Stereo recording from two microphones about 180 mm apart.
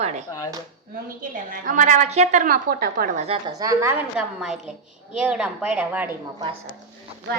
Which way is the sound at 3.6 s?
20° right (ahead or behind).